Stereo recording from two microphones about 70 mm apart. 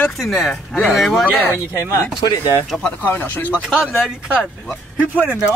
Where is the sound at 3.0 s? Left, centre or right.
Left.